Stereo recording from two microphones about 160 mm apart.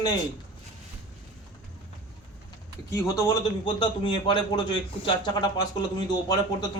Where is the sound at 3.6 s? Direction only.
30° left (ahead or behind).